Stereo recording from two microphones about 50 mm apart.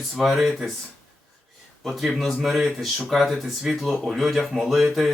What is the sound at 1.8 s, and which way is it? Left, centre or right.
Speech, centre.